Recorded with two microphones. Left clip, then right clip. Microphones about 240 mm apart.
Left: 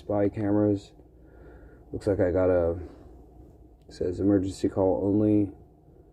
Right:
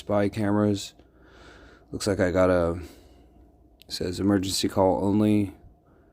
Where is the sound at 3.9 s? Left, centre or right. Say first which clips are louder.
Left 1 dB; right.